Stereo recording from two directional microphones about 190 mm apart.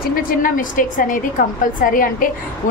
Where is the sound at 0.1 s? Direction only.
45° left (ahead or behind).